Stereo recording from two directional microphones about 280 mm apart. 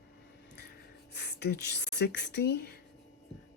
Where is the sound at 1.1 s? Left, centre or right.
Left.